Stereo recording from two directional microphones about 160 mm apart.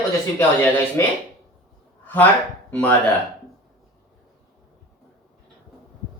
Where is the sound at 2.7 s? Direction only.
10° left (ahead or behind).